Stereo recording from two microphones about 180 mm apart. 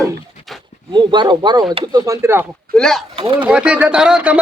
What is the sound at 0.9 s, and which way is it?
Speech, 25° right (ahead or behind).